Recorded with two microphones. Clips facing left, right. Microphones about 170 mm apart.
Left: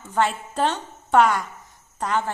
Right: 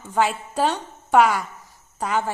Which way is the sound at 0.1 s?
10° right (ahead or behind).